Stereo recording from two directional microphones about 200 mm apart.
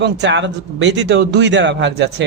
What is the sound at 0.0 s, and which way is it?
A man's voice, 60° right (ahead or behind).